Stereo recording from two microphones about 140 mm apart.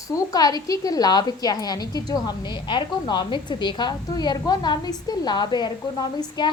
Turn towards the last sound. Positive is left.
turn(degrees=30)  # may be behind; listen again after turning